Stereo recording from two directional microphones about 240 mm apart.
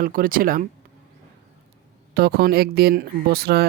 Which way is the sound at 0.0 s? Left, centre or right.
Right.